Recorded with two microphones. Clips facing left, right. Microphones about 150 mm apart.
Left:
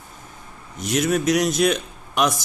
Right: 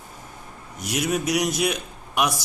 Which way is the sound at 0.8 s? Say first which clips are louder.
Left 4 dB; 10° right (ahead or behind).